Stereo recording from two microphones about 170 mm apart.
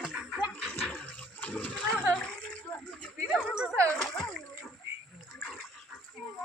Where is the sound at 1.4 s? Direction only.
5° left (ahead or behind).